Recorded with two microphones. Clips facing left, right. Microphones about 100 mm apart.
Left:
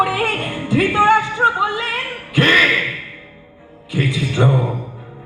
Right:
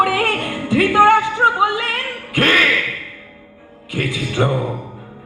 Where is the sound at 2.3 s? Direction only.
50° right (ahead or behind).